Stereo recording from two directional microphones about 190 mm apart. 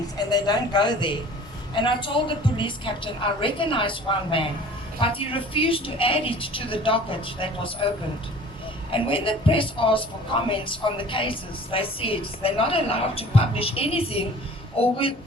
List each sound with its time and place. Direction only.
0.2 s a woman's voice: 20° left (ahead or behind)
8.9 s a woman's voice: 25° left (ahead or behind)